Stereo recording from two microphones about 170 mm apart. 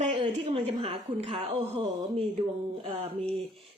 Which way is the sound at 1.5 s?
35° right (ahead or behind).